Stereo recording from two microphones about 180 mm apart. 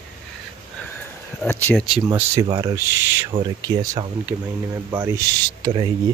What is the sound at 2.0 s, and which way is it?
Speech, 15° right (ahead or behind).